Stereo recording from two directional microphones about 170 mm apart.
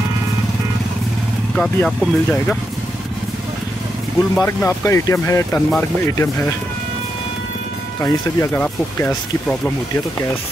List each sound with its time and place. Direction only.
1.5 s speech: 5° left (ahead or behind)
4.4 s speech: 15° left (ahead or behind)
8.0 s speech: 15° left (ahead or behind)